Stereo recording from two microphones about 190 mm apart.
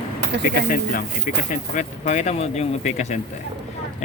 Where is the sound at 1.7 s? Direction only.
40° left (ahead or behind).